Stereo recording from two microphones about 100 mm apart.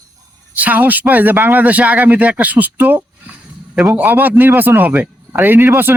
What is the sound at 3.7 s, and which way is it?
Speech, 5° right (ahead or behind).